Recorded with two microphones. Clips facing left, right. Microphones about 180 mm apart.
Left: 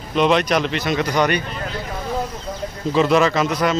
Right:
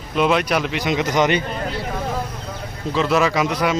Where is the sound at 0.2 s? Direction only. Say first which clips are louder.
Left 1 dB; 5° right (ahead or behind).